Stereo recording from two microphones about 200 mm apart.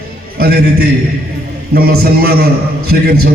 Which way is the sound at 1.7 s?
50° right (ahead or behind).